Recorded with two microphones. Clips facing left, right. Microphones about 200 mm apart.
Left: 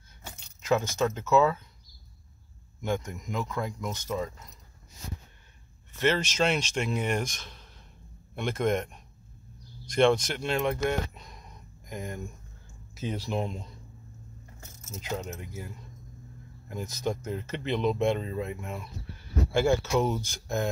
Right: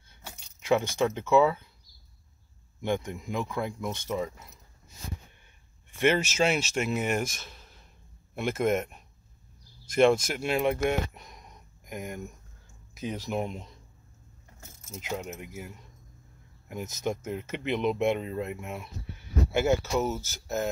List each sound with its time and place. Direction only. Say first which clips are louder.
0.7 s speech: right 1 dB; 15° right (ahead or behind)
2.8 s speech: right 1 dB; 25° right (ahead or behind)
3.3 s speech: right 1 dB; 10° right (ahead or behind)
5.9 s speech: right 2 dB; 10° right (ahead or behind)
12.9 s speech: even; centre (ahead or behind)
14.9 s speech: even; 10° right (ahead or behind)
17.2 s speech: even; 5° right (ahead or behind)